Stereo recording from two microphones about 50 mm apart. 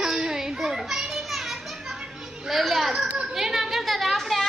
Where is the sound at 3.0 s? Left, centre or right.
Right.